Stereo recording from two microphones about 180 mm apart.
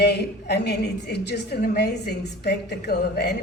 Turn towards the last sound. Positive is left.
turn(degrees=70)  # may be behind; listen again after turning